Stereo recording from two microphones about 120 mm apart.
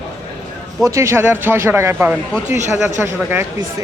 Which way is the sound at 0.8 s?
25° right (ahead or behind).